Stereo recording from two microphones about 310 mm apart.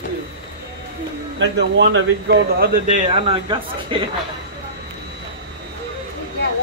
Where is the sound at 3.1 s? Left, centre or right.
Centre.